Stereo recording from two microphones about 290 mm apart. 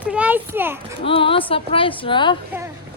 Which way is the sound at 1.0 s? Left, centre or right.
Centre.